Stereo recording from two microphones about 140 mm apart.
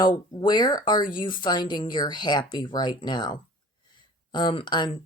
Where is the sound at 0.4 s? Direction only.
30° left (ahead or behind).